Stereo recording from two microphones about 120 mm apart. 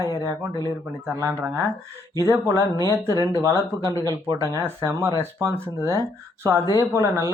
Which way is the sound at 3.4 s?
30° right (ahead or behind).